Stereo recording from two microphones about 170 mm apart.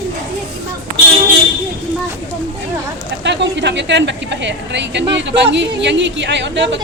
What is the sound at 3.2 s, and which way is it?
A woman's voice, 90° right.